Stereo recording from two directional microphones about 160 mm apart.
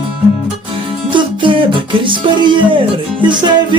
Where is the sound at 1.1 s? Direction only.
30° right (ahead or behind).